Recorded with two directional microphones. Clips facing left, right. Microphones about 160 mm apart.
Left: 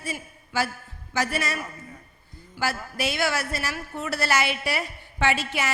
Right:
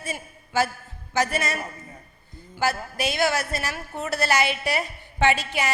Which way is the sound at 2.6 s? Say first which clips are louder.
Right 2 dB; 20° right (ahead or behind).